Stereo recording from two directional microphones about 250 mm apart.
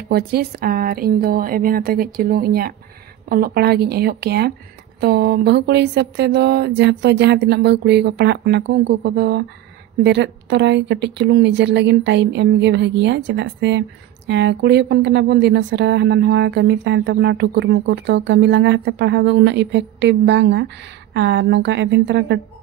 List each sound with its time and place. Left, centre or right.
0.1 s speech: right